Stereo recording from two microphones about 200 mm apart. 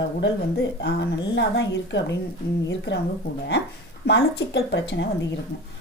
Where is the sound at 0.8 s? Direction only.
60° left (ahead or behind).